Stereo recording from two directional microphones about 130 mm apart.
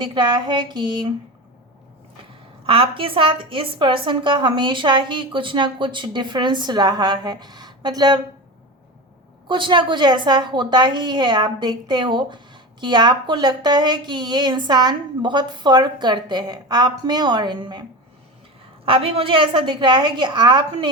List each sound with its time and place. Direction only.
0.0 s a woman's voice: 35° right (ahead or behind)
2.6 s a woman's voice: 45° right (ahead or behind)
9.5 s a woman's voice: 40° right (ahead or behind)
18.9 s a woman's voice: 45° right (ahead or behind)